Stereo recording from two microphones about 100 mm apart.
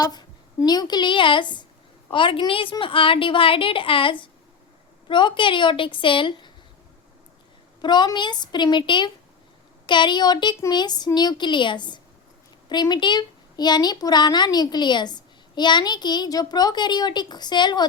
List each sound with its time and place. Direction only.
0.0 s a woman's voice: 45° left (ahead or behind)
7.8 s a woman's voice: 45° left (ahead or behind)